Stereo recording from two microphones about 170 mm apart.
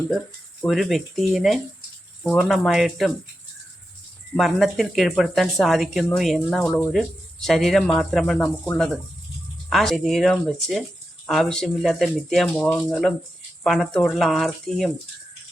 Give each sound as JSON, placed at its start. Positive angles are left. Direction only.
{"t": 0.6, "sound": "speech", "side_deg": 0}
{"t": 4.4, "sound": "speech", "side_deg": 0}